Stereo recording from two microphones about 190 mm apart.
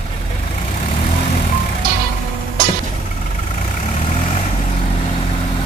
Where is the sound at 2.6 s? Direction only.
50° right (ahead or behind).